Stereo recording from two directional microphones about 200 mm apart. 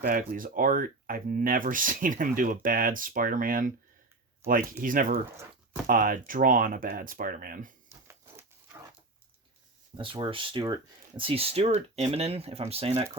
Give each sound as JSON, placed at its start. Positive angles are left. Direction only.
{"t": 0.1, "sound": "speech", "side_deg": -45}
{"t": 7.9, "sound": "a sound", "side_deg": -15}
{"t": 10.0, "sound": "speech", "side_deg": -25}